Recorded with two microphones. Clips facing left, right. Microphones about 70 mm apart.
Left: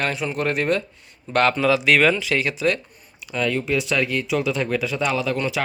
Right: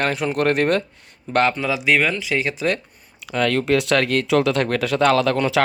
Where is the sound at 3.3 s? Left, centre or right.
Right.